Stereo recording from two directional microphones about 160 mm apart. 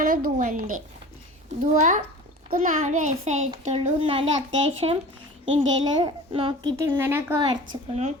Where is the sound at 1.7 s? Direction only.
50° right (ahead or behind).